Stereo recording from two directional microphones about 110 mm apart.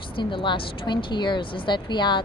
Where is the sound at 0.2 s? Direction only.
45° left (ahead or behind).